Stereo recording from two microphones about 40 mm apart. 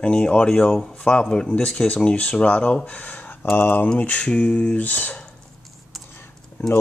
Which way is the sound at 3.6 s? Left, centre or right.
Left.